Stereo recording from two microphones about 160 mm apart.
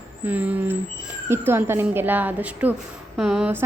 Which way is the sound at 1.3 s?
15° right (ahead or behind).